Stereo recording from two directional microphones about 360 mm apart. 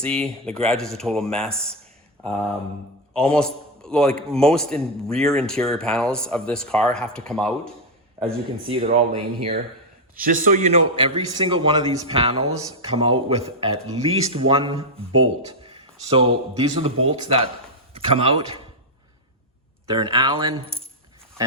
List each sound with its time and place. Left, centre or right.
0.0 s a man's voice: centre
3.1 s a man's voice: centre
8.6 s speech: centre
9.0 s speech: right
10.2 s a man's voice: right
19.9 s speech: centre